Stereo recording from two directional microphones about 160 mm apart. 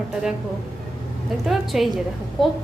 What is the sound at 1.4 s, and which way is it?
Speech, centre (ahead or behind).